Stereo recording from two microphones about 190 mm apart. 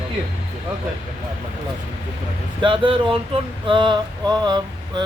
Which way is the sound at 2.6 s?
25° right (ahead or behind).